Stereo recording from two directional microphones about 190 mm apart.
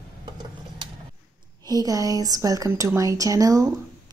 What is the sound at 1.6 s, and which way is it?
A woman's voice, 20° right (ahead or behind).